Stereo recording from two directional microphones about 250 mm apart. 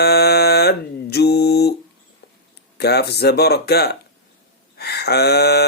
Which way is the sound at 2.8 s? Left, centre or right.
Left.